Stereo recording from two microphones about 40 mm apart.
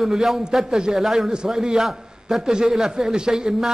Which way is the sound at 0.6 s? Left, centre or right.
Centre.